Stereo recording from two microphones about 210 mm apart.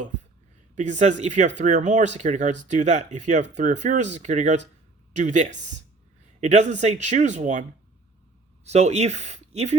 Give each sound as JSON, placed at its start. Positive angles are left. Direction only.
{"t": 0.8, "sound": "speech", "side_deg": -35}
{"t": 8.6, "sound": "speech", "side_deg": -30}